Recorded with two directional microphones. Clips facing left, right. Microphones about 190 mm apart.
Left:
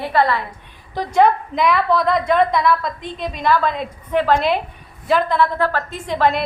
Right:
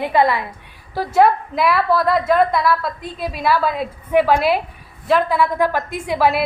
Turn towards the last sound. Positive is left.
turn(degrees=-10)  # may be behind; listen again after turning